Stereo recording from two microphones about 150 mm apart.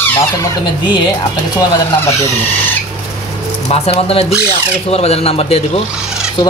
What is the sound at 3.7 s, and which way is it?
A man's voice, 40° left (ahead or behind).